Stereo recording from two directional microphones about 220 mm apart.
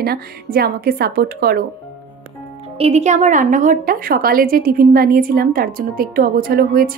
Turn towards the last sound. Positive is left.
turn(degrees=-40)  # may be behind; listen again after turning